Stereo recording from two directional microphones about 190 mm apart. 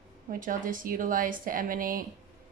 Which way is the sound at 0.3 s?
45° right (ahead or behind).